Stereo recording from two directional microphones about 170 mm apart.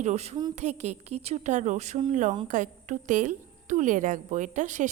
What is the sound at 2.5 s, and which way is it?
A woman's voice, 50° right (ahead or behind).